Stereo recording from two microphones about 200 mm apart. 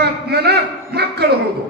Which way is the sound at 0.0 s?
55° right (ahead or behind).